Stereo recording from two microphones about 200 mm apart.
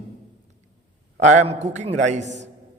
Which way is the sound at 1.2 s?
35° right (ahead or behind).